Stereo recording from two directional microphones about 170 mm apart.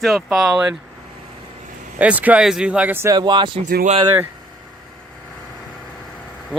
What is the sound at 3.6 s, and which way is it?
Speech, 55° right (ahead or behind).